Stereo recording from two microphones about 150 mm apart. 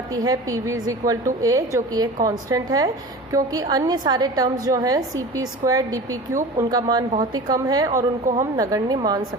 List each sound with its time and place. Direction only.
0.1 s a woman's voice: 25° right (ahead or behind)